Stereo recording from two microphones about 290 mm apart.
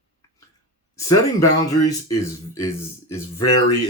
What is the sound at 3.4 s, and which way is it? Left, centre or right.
Speech, left.